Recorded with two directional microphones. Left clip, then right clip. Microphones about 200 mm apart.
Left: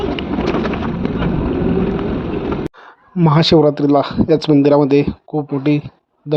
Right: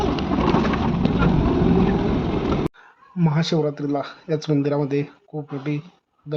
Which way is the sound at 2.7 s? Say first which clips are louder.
Left 9 dB; 40° left (ahead or behind).